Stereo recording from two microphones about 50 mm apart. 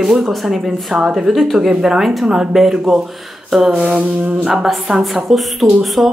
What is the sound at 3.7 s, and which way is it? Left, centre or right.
Mantra, right.